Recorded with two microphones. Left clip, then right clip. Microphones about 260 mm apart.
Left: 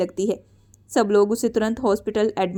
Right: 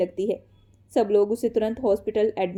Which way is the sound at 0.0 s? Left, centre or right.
Left.